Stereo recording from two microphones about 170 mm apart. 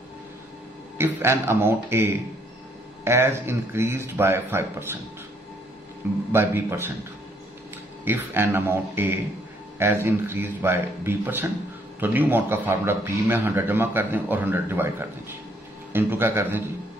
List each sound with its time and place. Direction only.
0.9 s a man's voice: 15° right (ahead or behind)
6.3 s a man's voice: 15° right (ahead or behind)
8.0 s a man's voice: 15° right (ahead or behind)